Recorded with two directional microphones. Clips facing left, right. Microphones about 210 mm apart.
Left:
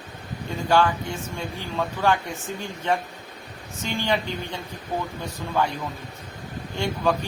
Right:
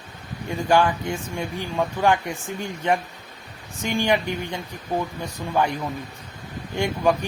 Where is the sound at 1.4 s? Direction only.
15° right (ahead or behind).